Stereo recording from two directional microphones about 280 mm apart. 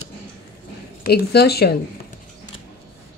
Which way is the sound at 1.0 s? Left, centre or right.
Left.